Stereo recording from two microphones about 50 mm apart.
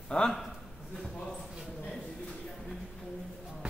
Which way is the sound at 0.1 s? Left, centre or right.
Centre.